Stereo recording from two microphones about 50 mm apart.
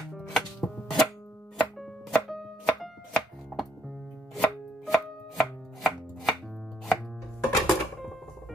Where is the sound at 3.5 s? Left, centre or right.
Left.